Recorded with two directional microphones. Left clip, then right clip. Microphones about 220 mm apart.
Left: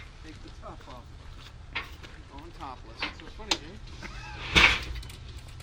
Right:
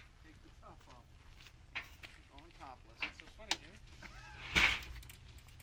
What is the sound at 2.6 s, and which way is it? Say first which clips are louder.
Speech: left 12 dB; 10° left (ahead or behind).